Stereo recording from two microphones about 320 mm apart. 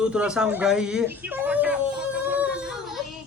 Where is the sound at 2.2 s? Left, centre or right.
Centre.